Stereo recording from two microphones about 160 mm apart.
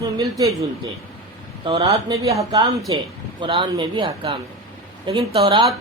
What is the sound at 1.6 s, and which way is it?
A man's voice, 30° right (ahead or behind).